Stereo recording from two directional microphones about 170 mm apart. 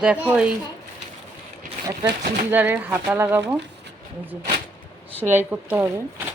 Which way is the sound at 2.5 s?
10° right (ahead or behind).